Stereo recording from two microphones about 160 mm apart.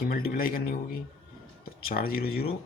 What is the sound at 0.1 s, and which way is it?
Speech, 65° left (ahead or behind).